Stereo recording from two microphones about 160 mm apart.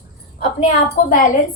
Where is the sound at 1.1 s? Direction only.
55° left (ahead or behind).